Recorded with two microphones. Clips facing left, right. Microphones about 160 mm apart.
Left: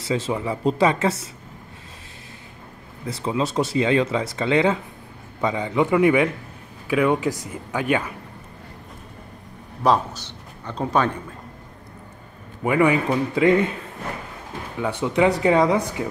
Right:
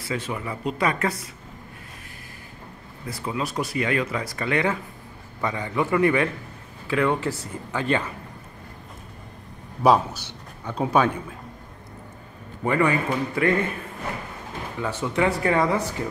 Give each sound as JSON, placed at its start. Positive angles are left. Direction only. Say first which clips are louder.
{"t": 0.1, "sound": "speech", "louder": "left 6 dB", "side_deg": 25}
{"t": 3.1, "sound": "a man's voice", "louder": "left 5 dB", "side_deg": 25}
{"t": 9.8, "sound": "a man's voice", "louder": "right 1 dB", "side_deg": -10}
{"t": 12.6, "sound": "a man's voice", "louder": "left 3 dB", "side_deg": 15}
{"t": 14.8, "sound": "a man's voice", "louder": "left 4 dB", "side_deg": 15}